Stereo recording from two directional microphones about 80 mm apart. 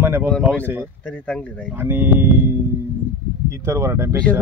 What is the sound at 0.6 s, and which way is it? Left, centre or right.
Speech, right.